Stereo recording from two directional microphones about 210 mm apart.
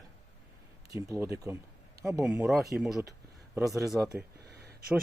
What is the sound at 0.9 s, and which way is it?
Speech, 15° right (ahead or behind).